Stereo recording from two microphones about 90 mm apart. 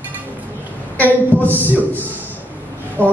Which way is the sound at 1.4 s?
20° left (ahead or behind).